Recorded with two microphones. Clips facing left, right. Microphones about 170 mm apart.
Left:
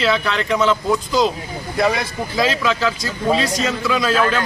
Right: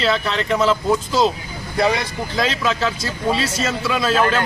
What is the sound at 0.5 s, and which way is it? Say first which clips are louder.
Speech: even; 30° right (ahead or behind).